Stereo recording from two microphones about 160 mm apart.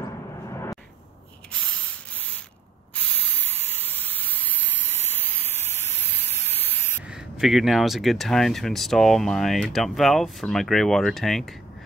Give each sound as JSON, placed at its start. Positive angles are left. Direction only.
{"t": 0.5, "sound": "a sound", "side_deg": 20}
{"t": 3.7, "sound": "steam", "side_deg": 10}
{"t": 7.1, "sound": "speech", "side_deg": -5}